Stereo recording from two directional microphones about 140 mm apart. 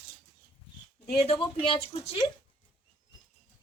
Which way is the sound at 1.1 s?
40° left (ahead or behind).